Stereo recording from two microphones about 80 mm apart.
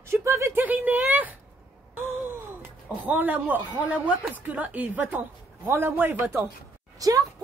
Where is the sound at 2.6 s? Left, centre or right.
Right.